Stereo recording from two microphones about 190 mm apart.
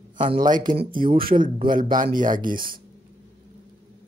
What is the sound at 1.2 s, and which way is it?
Speech, 45° right (ahead or behind).